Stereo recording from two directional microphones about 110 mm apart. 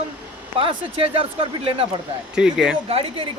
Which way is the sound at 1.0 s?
60° right (ahead or behind).